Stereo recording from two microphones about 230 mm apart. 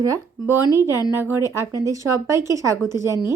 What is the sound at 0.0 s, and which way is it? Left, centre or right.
A woman's voice, centre.